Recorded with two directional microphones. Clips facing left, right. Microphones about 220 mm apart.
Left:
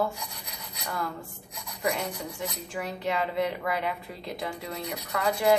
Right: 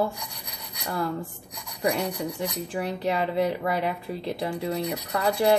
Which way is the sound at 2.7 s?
35° right (ahead or behind).